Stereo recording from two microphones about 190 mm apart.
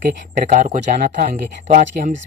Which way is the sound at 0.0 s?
45° right (ahead or behind).